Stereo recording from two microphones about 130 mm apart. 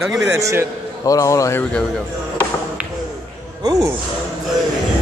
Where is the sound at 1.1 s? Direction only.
25° left (ahead or behind).